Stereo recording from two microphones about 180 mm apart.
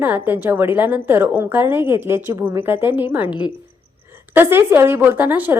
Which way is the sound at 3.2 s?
25° left (ahead or behind).